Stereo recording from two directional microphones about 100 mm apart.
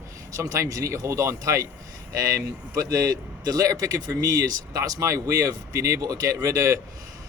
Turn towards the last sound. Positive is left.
turn(degrees=-35)  # may be behind; listen again after turning